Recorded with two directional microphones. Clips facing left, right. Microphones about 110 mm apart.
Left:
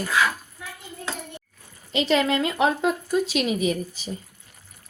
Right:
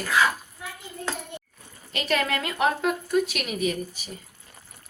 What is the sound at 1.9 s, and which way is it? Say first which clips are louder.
A woman's voice: left 5 dB; 25° left (ahead or behind).